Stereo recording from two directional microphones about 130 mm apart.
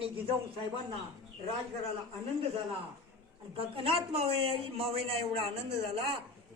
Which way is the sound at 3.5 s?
45° right (ahead or behind).